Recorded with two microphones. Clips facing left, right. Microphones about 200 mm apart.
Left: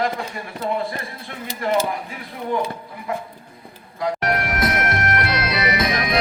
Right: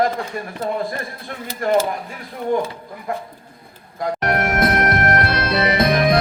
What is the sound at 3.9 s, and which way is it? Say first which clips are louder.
Music: right 2 dB; 50° right (ahead or behind).